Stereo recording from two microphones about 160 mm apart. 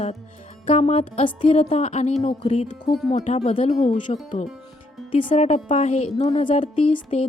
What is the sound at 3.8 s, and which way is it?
Speech, 55° left (ahead or behind).